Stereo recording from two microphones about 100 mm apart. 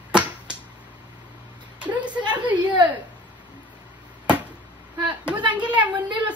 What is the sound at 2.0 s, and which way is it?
Speech, 50° right (ahead or behind).